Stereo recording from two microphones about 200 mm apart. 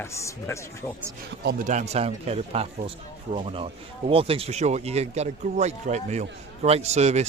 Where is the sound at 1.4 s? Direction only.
40° right (ahead or behind).